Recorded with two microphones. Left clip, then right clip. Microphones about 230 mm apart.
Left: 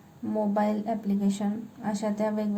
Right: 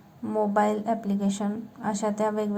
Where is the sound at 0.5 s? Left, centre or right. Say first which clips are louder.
Right 5 dB; right.